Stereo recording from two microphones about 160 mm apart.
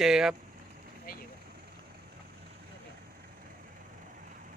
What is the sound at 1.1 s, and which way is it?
Speech, 65° left (ahead or behind).